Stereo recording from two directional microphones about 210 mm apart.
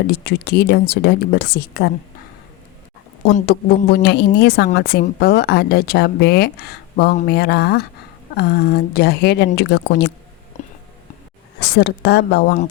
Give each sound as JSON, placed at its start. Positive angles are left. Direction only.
{"t": 0.1, "sound": "speech", "side_deg": 50}
{"t": 3.8, "sound": "speech", "side_deg": 50}
{"t": 10.5, "sound": "music", "side_deg": 35}
{"t": 11.8, "sound": "speech", "side_deg": 55}